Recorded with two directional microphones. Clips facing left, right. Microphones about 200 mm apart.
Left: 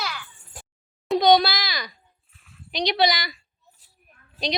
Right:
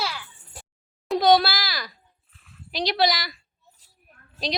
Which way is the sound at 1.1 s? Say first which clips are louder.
Left 1 dB; 5° right (ahead or behind).